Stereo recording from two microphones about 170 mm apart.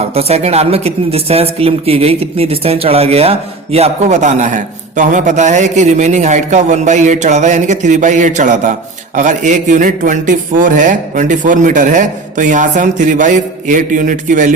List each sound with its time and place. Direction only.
0.1 s speech: 35° right (ahead or behind)